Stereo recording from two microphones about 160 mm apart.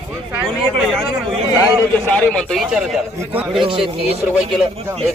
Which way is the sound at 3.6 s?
35° right (ahead or behind).